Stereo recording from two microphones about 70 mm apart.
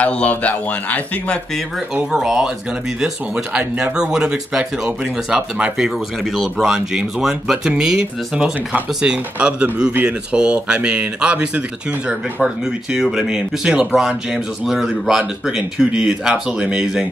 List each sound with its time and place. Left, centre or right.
0.0 s a man's voice: centre
2.1 s speech: centre